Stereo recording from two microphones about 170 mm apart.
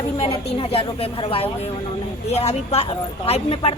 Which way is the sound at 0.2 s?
35° left (ahead or behind).